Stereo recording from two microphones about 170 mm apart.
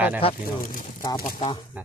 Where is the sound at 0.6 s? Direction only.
55° left (ahead or behind).